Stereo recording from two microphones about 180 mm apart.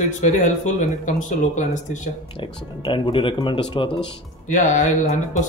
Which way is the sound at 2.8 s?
25° left (ahead or behind).